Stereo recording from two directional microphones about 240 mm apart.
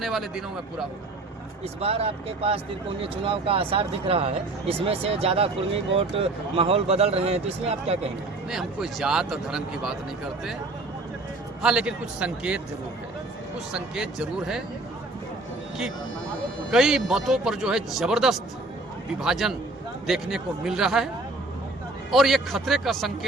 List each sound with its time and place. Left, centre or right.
0.0 s speech: centre
1.8 s speech: right
8.4 s speech: centre
11.6 s speech: centre
13.7 s speech: centre
16.7 s speech: centre
22.1 s speech: centre